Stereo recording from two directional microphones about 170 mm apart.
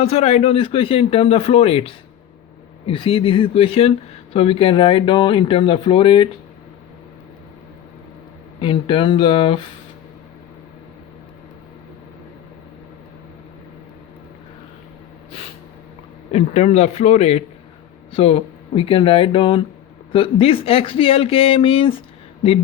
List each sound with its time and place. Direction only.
0.0 s speech: 35° left (ahead or behind)
8.6 s speech: 30° left (ahead or behind)
16.3 s speech: 40° left (ahead or behind)